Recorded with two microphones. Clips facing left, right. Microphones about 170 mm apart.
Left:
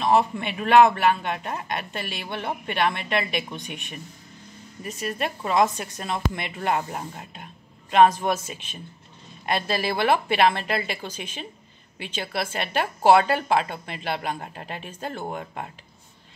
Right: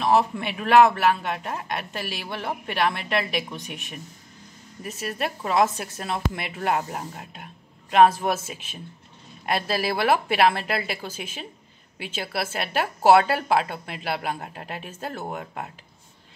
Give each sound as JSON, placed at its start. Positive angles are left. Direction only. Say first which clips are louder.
{"t": 0.0, "sound": "speech", "louder": "even", "side_deg": -5}